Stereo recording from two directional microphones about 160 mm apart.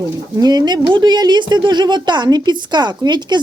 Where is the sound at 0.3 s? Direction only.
25° right (ahead or behind).